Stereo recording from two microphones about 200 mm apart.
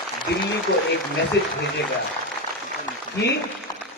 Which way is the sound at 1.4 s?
55° left (ahead or behind).